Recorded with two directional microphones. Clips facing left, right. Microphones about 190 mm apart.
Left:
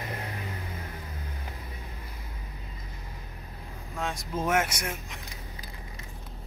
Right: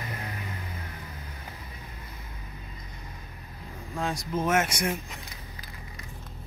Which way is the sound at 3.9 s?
Centre (ahead or behind).